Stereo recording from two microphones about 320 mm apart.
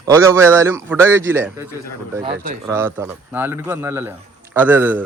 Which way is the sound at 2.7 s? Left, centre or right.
Centre.